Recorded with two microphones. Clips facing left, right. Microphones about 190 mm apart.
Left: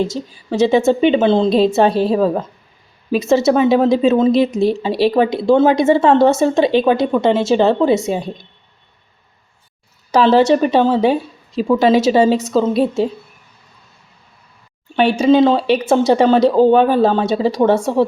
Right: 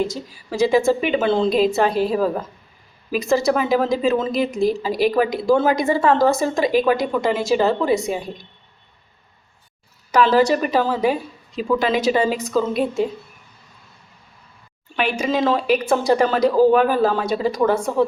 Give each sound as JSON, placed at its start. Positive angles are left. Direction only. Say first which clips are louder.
{"t": 0.9, "sound": "speech", "louder": "left 6 dB", "side_deg": 25}
{"t": 10.1, "sound": "a woman's voice", "louder": "left 4 dB", "side_deg": 30}
{"t": 14.9, "sound": "speech", "louder": "left 9 dB", "side_deg": 30}